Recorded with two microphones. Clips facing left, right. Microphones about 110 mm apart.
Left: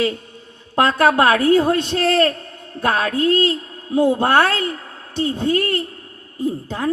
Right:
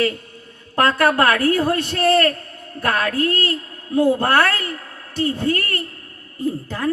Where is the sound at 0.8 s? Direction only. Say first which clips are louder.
Left 2 dB; 20° left (ahead or behind).